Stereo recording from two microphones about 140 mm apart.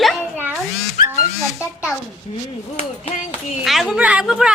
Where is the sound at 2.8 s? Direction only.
45° left (ahead or behind).